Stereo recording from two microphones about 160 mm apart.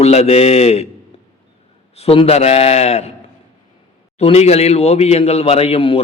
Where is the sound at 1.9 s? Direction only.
40° left (ahead or behind).